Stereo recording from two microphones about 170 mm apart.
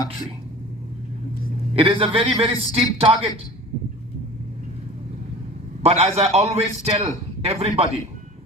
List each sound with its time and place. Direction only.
1.7 s a man's voice: 30° right (ahead or behind)
5.8 s a man's voice: 35° right (ahead or behind)